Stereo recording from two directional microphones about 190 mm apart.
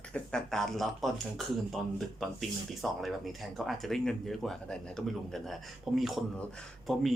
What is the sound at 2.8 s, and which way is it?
Speech, centre (ahead or behind).